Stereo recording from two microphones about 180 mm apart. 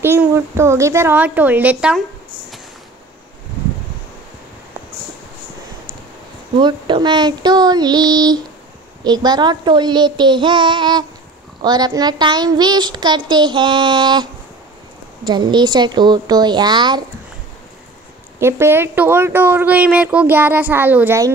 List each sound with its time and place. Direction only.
0.0 s speech: 15° right (ahead or behind)
6.6 s speech: 25° right (ahead or behind)
18.4 s speech: 15° right (ahead or behind)